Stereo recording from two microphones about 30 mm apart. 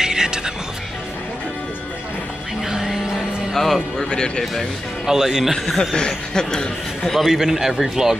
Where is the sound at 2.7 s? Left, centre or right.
Centre.